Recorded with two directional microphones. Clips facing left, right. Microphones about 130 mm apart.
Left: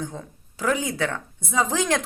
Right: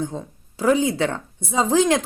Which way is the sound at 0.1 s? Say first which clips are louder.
Right 5 dB; 20° right (ahead or behind).